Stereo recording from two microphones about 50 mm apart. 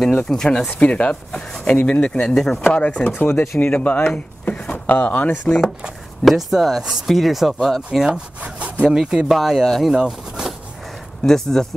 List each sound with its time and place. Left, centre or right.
0.0 s speech: centre
0.7 s speech: left
2.3 s speech: centre
2.8 s speech: left
6.2 s speech: centre
7.1 s speech: centre
8.1 s wood: right
8.9 s speech: centre
9.3 s speech: centre
9.8 s speech: centre
11.2 s speech: centre